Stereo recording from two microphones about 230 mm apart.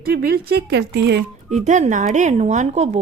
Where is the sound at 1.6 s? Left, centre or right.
Right.